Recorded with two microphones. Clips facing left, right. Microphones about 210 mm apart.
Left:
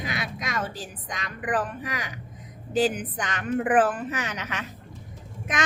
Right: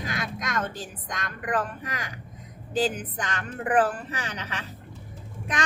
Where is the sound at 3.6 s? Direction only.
40° right (ahead or behind).